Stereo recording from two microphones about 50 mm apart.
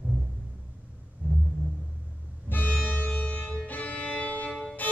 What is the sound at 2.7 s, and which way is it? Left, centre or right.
Music, left.